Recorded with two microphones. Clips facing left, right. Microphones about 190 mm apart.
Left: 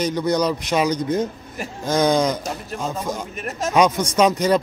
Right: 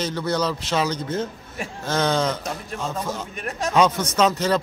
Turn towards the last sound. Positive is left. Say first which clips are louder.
# left 3 dB
turn(degrees=15)  # may be behind; listen again after turning